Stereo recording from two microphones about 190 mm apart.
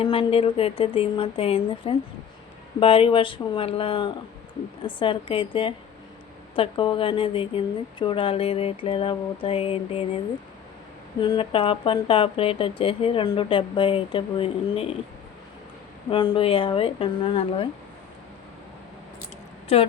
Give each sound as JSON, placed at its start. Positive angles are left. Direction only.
{"t": 0.0, "sound": "speech", "side_deg": 30}
{"t": 11.2, "sound": "speech", "side_deg": 25}
{"t": 16.0, "sound": "speech", "side_deg": 25}